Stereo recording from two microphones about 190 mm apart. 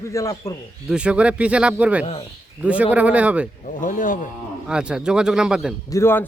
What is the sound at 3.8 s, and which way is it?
Speech, 45° left (ahead or behind).